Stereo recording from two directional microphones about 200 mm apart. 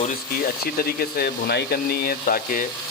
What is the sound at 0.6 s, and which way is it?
Speech, 50° left (ahead or behind).